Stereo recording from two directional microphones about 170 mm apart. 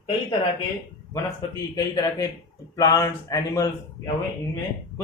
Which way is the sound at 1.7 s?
20° left (ahead or behind).